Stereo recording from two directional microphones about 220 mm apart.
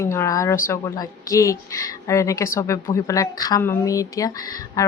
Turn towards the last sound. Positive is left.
turn(degrees=15)  # may be behind; listen again after turning